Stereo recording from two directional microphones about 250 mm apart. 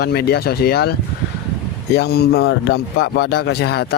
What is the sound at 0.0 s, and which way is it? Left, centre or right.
Speech, left.